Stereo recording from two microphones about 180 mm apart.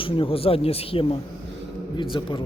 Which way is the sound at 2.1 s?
25° left (ahead or behind).